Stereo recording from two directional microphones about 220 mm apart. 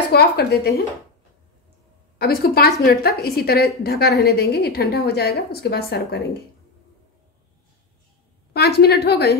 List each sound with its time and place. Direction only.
0.1 s a woman's voice: 45° left (ahead or behind)
2.1 s a woman's voice: 45° left (ahead or behind)
8.5 s a woman's voice: 45° left (ahead or behind)